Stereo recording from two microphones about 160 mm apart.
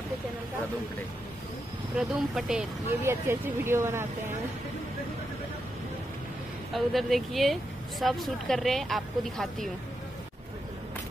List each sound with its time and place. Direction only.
2.0 s speech: 5° right (ahead or behind)
3.0 s speech: 15° right (ahead or behind)
6.7 s speech: centre (ahead or behind)